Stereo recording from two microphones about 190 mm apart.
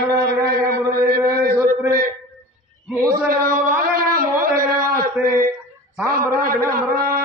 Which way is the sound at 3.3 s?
50° right (ahead or behind).